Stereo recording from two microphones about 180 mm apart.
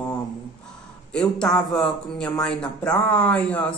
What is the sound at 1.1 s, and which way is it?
Speech, 5° left (ahead or behind).